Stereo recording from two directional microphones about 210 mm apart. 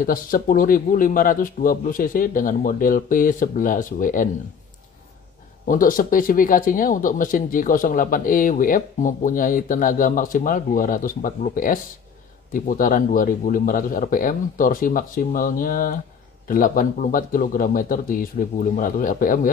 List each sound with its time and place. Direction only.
0.0 s speech: 40° left (ahead or behind)
5.7 s speech: 40° left (ahead or behind)